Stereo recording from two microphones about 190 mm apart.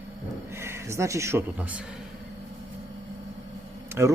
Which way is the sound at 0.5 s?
15° right (ahead or behind).